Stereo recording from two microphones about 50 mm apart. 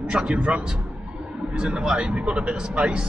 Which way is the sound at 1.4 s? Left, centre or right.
Centre.